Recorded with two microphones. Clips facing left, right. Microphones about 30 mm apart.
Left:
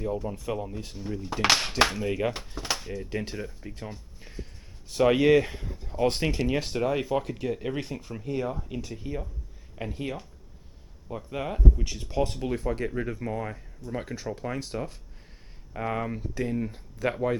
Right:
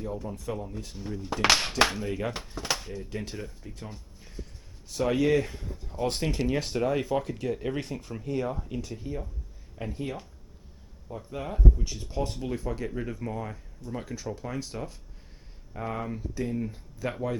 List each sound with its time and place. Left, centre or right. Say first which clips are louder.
0.3 s speech: left 3 dB; left
0.9 s speech: left 1 dB; centre
2.0 s speech: left 4 dB; centre
3.1 s speech: left 5 dB; centre
4.2 s a sound: even; left
4.9 s speech: left 4 dB; left
11.3 s speech: left 1 dB; left
17.0 s speech: left 5 dB; left